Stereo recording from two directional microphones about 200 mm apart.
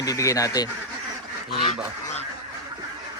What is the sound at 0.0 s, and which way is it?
Speech, 15° left (ahead or behind).